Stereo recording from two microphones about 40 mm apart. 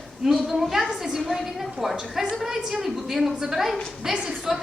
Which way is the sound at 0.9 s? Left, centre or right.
Centre.